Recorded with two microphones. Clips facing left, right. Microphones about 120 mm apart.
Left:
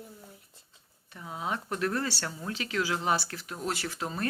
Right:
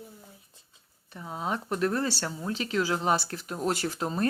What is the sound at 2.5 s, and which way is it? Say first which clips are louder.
Speech: right 3 dB; 30° right (ahead or behind).